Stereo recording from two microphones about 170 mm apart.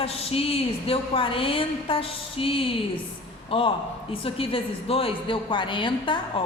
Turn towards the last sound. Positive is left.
turn(degrees=30)  # may be behind; listen again after turning